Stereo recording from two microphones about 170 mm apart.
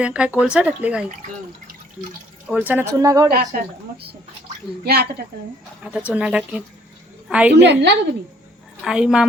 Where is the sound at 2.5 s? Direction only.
5° right (ahead or behind).